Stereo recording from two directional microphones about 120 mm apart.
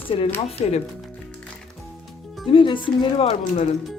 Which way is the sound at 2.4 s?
45° left (ahead or behind).